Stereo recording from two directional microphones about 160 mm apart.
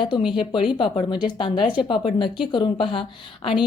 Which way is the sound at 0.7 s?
30° left (ahead or behind).